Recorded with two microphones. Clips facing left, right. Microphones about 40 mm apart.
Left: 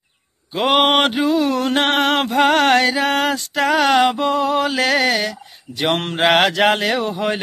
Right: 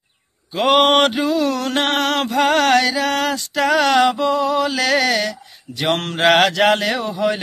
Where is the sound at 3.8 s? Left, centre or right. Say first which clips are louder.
Even; left.